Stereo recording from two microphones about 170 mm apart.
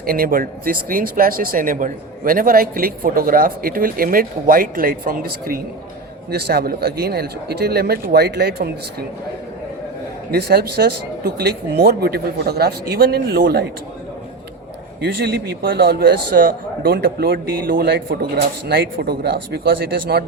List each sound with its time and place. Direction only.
0.0 s speech: 60° right (ahead or behind)
10.3 s speech: 65° right (ahead or behind)
15.0 s speech: 70° right (ahead or behind)